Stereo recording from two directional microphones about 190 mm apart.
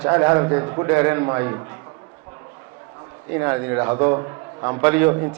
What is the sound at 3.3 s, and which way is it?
A man's voice, 15° right (ahead or behind).